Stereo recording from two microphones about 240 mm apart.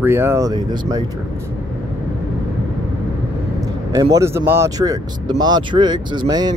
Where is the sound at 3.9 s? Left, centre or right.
Centre.